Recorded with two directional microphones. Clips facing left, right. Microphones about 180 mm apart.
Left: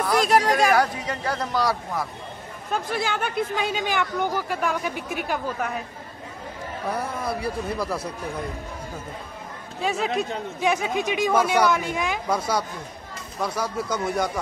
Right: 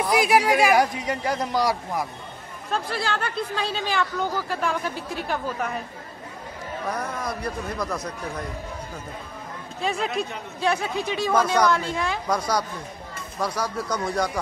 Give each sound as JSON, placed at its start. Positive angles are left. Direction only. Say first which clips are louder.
{"t": 0.0, "sound": "a man's voice", "louder": "even", "side_deg": -10}
{"t": 2.7, "sound": "speech", "louder": "left 1 dB", "side_deg": 15}
{"t": 6.9, "sound": "speech", "louder": "left 2 dB", "side_deg": 5}
{"t": 9.8, "sound": "speech", "louder": "left 1 dB", "side_deg": 5}
{"t": 10.6, "sound": "speech", "louder": "left 1 dB", "side_deg": 15}
{"t": 12.3, "sound": "speech", "louder": "even", "side_deg": 25}
{"t": 13.8, "sound": "speech", "louder": "even", "side_deg": 25}